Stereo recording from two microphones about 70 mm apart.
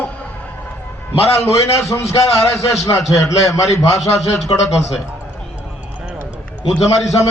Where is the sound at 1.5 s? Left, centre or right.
Left.